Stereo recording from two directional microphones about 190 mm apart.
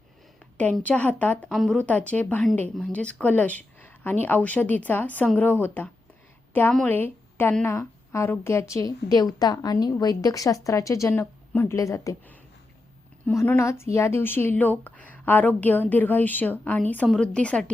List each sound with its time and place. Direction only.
0.5 s a woman's voice: 5° left (ahead or behind)